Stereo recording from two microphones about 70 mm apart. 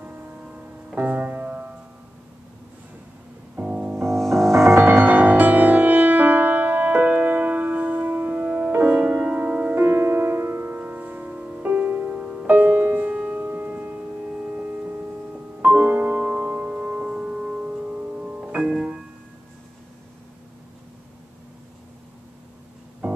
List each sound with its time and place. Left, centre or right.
0.0 s music: centre
3.5 s music: centre
4.1 s music: centre
4.8 s music: right